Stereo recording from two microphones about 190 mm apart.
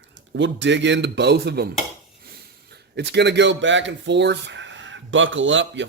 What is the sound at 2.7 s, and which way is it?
Speech, 60° right (ahead or behind).